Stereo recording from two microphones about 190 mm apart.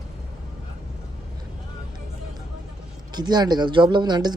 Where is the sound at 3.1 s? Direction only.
20° right (ahead or behind).